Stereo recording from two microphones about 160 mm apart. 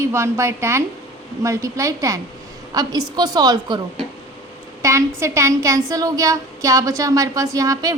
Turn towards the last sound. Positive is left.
turn(degrees=-20)  # may be behind; listen again after turning